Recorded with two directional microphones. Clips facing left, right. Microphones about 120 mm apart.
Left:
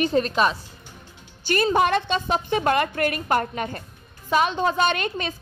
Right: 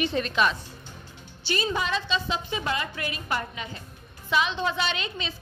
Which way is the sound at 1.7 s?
55° left (ahead or behind).